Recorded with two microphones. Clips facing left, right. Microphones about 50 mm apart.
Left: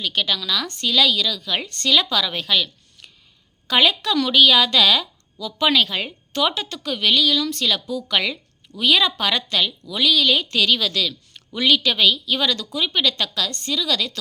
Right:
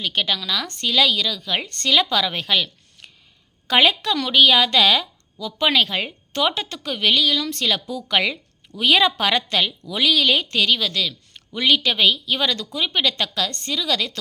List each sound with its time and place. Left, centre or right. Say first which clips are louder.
0.0 s a woman's voice: even; right
3.7 s a woman's voice: right 1 dB; right
10.6 s a woman's voice: left 1 dB; centre